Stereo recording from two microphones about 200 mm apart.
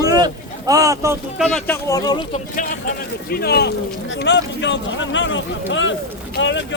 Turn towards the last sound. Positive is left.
turn(degrees=65)  # may be behind; listen again after turning